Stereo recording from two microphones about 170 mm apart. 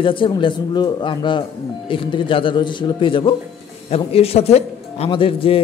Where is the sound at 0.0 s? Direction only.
30° left (ahead or behind).